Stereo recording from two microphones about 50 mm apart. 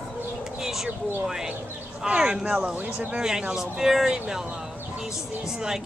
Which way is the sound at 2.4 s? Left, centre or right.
Right.